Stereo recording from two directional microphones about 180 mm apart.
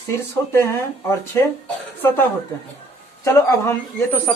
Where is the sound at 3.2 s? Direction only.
15° left (ahead or behind).